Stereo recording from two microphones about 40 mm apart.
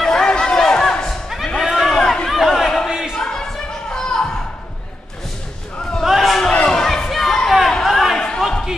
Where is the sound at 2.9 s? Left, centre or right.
Centre.